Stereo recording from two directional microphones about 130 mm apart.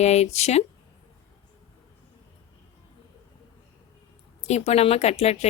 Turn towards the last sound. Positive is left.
turn(degrees=55)  # may be behind; listen again after turning